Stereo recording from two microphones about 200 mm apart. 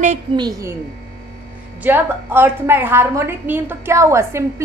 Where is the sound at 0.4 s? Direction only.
15° right (ahead or behind).